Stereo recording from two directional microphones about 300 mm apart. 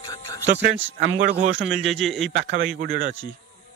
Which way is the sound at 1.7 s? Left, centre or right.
Centre.